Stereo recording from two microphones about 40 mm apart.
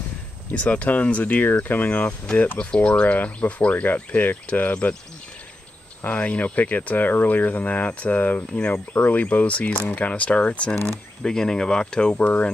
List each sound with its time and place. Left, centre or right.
0.5 s speech: left
1.6 s speech: left
2.6 s speech: left
4.8 s speech: left
6.0 s speech: left
11.2 s speech: centre